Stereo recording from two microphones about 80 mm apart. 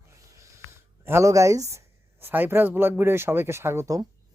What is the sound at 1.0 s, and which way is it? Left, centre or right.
Speech, right.